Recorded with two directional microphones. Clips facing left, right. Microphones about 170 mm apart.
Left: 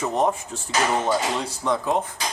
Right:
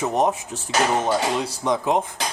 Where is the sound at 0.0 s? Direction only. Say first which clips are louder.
Right 2 dB; 15° right (ahead or behind).